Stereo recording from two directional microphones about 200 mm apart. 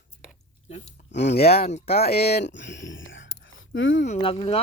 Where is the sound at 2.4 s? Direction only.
60° left (ahead or behind).